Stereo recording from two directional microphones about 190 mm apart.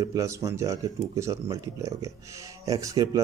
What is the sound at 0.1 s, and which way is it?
Speech, 15° right (ahead or behind).